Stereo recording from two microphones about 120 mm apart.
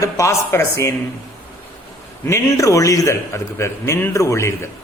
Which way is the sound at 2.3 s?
25° left (ahead or behind).